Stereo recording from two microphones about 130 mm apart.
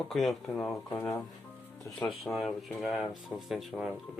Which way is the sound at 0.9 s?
15° left (ahead or behind).